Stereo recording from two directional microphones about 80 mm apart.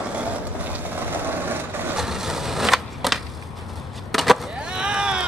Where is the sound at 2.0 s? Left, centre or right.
Centre.